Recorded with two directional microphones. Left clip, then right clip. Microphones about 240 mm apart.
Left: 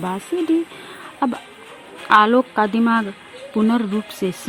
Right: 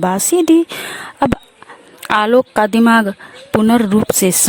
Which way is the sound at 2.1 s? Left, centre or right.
Right.